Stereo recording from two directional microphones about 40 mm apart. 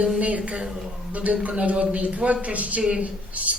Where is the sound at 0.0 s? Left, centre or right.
Right.